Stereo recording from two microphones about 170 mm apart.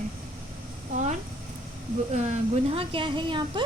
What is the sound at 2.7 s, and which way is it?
Speech, 30° right (ahead or behind).